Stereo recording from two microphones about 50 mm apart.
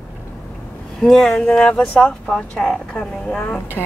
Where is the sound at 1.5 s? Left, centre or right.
Left.